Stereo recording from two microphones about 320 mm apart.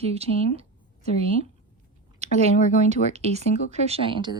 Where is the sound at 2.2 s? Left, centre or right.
Centre.